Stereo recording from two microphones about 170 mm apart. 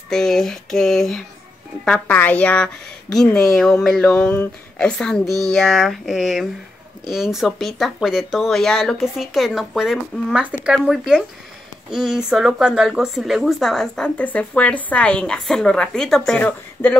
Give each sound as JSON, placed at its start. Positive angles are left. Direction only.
{"t": 0.1, "sound": "a woman's voice", "side_deg": 0}